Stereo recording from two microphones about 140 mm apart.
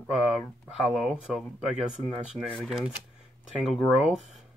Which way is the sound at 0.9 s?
5° right (ahead or behind).